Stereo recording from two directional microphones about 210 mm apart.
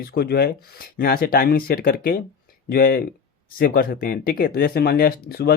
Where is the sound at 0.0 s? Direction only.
50° left (ahead or behind).